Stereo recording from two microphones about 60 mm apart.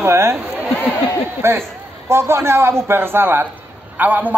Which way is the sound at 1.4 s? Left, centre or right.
Right.